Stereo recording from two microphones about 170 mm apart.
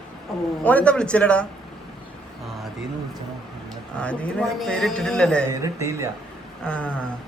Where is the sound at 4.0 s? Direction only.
5° left (ahead or behind).